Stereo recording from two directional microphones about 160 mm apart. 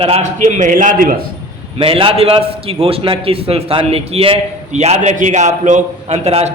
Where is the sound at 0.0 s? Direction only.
40° right (ahead or behind).